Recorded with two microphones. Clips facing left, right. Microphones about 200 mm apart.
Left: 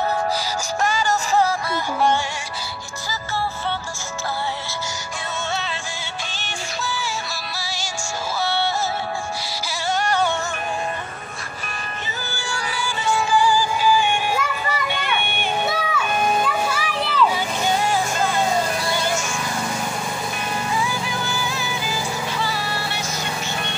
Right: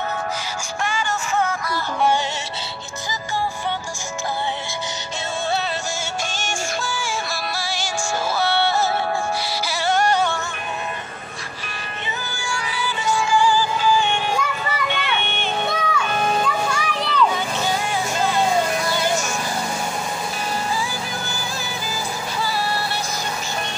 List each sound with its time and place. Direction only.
0.8 s music: 40° left (ahead or behind)
6.4 s music: 50° right (ahead or behind)
12.5 s music: 45° left (ahead or behind)
13.5 s music: 10° left (ahead or behind)
17.9 s music: 50° left (ahead or behind)
20.8 s music: 35° right (ahead or behind)